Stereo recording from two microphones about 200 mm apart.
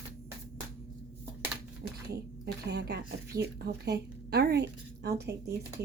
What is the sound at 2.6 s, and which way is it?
A woman's voice, 55° right (ahead or behind).